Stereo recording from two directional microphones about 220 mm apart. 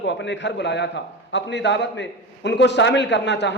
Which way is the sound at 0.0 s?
55° left (ahead or behind).